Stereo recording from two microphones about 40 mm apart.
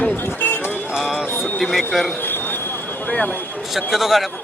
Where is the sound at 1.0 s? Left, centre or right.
Centre.